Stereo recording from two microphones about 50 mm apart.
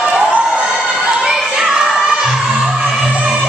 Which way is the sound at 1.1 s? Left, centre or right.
Centre.